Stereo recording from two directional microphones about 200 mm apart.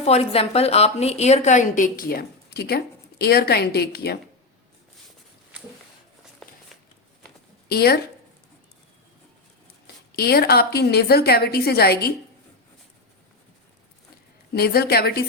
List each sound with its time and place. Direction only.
0.0 s a woman's voice: 30° left (ahead or behind); by 4.2 s 55° left (ahead or behind)
6.4 s a sound: centre (ahead or behind)
7.7 s a woman's voice: 50° left (ahead or behind)
9.8 s a woman's voice: 50° left (ahead or behind)
14.5 s a woman's voice: 50° left (ahead or behind)